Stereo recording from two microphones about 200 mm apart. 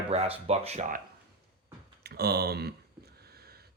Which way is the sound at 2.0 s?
50° right (ahead or behind).